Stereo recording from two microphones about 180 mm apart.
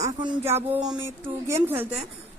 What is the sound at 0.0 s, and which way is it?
Speech, 25° right (ahead or behind).